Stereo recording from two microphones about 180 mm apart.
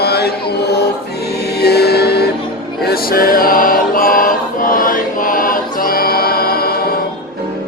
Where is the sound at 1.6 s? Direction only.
65° left (ahead or behind).